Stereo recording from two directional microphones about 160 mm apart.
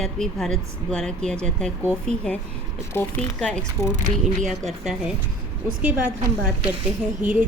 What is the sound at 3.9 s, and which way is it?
Speech, 50° right (ahead or behind).